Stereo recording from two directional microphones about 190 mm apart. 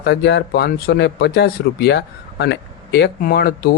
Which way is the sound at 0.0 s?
60° left (ahead or behind).